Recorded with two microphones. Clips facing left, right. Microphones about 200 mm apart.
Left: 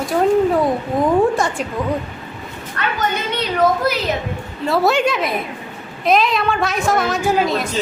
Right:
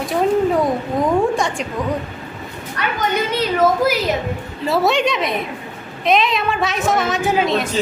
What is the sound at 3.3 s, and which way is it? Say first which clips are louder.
A woman's voice: right 1 dB; 5° right (ahead or behind).